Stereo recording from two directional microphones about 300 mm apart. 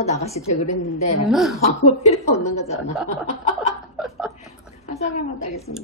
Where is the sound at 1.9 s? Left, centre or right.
Left.